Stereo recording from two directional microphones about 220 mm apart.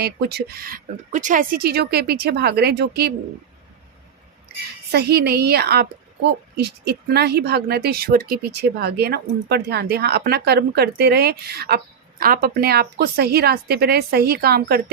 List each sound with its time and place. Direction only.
0.0 s a woman's voice: 45° right (ahead or behind)
4.9 s a woman's voice: 45° right (ahead or behind)